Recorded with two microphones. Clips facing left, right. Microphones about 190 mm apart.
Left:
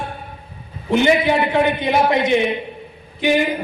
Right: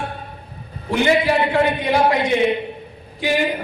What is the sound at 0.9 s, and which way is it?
A man's voice, 20° left (ahead or behind).